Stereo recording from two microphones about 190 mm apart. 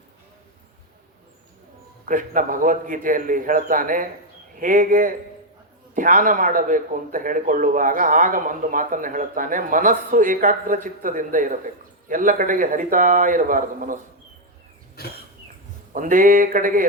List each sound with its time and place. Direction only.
2.0 s a man's voice: 45° right (ahead or behind)
15.0 s cough: 55° left (ahead or behind)
16.0 s a man's voice: 45° right (ahead or behind)